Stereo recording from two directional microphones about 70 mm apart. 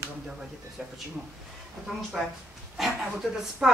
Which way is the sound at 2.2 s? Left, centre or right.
Centre.